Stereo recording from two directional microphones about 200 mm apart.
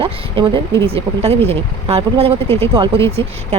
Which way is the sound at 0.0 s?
25° right (ahead or behind).